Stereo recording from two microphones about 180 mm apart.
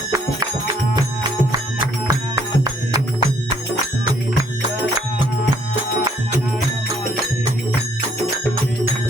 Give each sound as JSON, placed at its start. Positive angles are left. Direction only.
{"t": 2.0, "sound": "music", "side_deg": -20}